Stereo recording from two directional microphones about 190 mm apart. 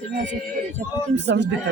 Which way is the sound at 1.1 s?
65° right (ahead or behind).